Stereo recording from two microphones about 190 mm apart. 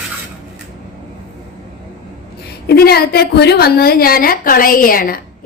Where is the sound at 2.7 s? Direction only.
55° left (ahead or behind).